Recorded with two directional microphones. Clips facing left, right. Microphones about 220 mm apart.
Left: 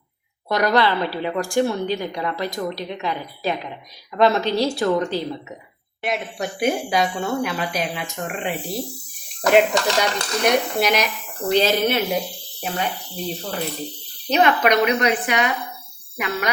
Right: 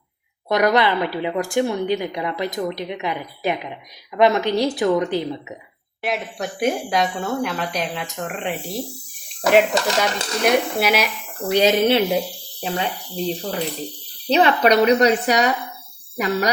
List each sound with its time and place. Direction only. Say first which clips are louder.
0.4 s a woman's voice: right 1 dB; 20° right (ahead or behind)
6.0 s speech: even; centre (ahead or behind)
11.9 s speech: right 4 dB; 30° right (ahead or behind)
13.1 s a woman's voice: right 4 dB; 15° right (ahead or behind)
14.3 s a woman's voice: right 2 dB; 30° right (ahead or behind)